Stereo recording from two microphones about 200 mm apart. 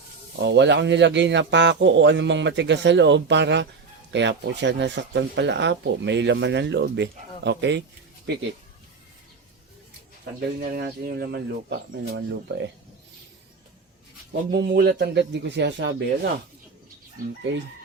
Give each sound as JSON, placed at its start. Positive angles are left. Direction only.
{"t": 0.3, "sound": "speech", "side_deg": -60}
{"t": 10.6, "sound": "speech", "side_deg": -50}
{"t": 14.5, "sound": "speech", "side_deg": -55}